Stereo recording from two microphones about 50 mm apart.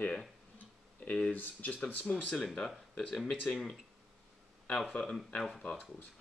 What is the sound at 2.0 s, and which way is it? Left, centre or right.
Speech, centre.